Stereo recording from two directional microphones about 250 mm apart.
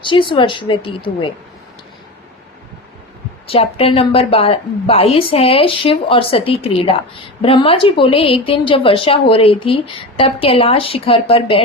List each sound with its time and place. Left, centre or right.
0.0 s a woman's voice: centre
3.5 s a woman's voice: left